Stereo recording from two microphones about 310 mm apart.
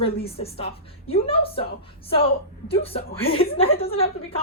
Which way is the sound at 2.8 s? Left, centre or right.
Centre.